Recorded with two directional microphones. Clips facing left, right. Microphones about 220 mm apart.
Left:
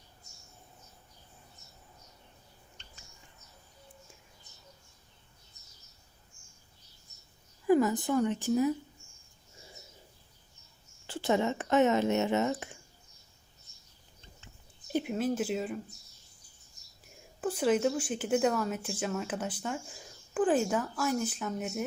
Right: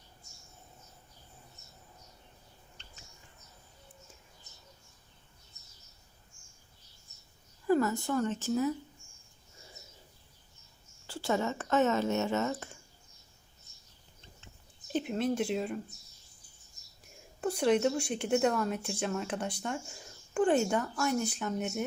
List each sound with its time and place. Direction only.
7.7 s speech: 15° left (ahead or behind)
11.0 s speech: 20° left (ahead or behind)
14.9 s speech: 5° left (ahead or behind)
17.4 s speech: 5° left (ahead or behind)